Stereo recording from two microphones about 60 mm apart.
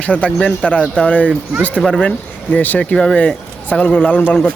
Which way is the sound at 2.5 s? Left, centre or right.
Left.